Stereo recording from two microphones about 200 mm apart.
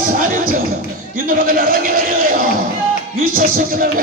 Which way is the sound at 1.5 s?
45° right (ahead or behind).